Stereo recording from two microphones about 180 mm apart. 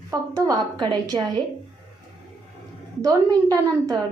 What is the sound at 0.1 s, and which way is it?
A woman's voice, 20° right (ahead or behind).